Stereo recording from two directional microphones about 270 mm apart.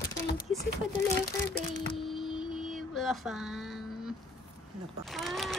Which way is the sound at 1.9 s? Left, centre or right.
Centre.